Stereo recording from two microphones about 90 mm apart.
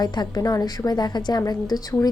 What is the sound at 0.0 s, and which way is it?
A woman's voice, 50° left (ahead or behind).